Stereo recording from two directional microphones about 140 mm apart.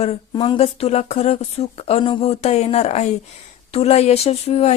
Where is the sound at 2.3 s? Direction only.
50° left (ahead or behind).